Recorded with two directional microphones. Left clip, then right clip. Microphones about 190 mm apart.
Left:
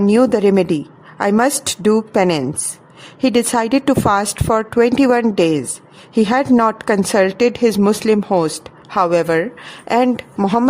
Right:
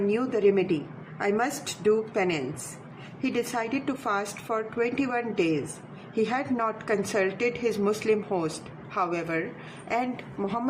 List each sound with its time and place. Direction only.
0.1 s a woman's voice: 85° left